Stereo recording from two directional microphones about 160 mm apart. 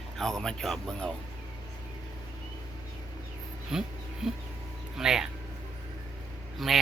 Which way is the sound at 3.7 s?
5° right (ahead or behind).